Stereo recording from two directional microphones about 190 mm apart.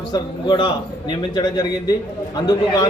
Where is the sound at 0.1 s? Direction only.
25° left (ahead or behind).